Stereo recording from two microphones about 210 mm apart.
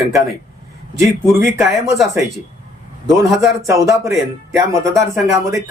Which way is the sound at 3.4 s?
15° right (ahead or behind).